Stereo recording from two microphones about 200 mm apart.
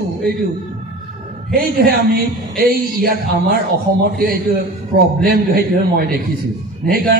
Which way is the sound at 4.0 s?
50° right (ahead or behind).